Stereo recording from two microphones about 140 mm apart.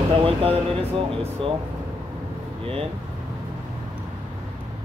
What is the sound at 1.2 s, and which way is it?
Speech, 45° right (ahead or behind).